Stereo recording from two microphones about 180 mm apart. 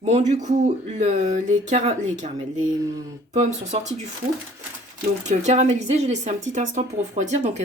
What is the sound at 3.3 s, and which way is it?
Speech, 40° right (ahead or behind).